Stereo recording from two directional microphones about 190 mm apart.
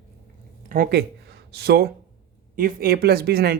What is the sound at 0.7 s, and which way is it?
Speech, 55° right (ahead or behind).